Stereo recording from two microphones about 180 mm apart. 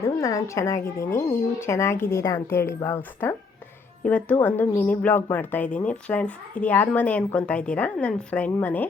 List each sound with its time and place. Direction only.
0.0 s speech: 20° left (ahead or behind)